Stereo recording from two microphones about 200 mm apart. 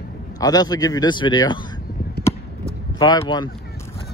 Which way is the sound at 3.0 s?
20° left (ahead or behind).